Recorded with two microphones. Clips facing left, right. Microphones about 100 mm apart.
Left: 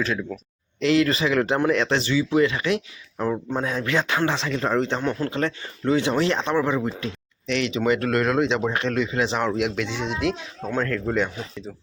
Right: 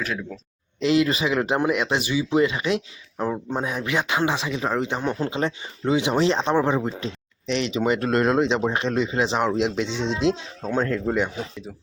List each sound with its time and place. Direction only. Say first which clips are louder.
0.8 s speech: even; 20° right (ahead or behind)